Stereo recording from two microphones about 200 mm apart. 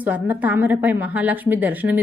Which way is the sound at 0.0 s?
10° right (ahead or behind).